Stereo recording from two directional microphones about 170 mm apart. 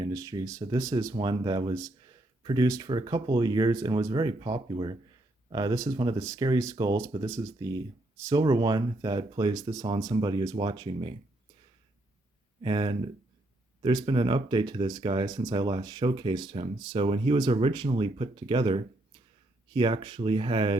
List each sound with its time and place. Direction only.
0.0 s speech: 20° right (ahead or behind)
12.6 s speech: 25° right (ahead or behind)